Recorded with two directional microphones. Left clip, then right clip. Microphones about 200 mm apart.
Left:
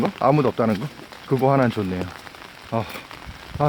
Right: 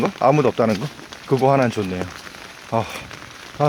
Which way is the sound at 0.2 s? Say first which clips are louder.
Right 3 dB; 20° left (ahead or behind).